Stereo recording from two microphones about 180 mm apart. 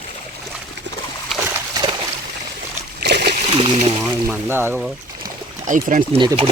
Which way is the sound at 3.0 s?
65° right (ahead or behind).